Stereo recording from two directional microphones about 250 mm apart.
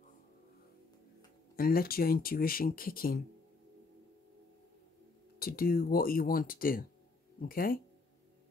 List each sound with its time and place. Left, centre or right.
1.6 s speech: left
5.4 s speech: left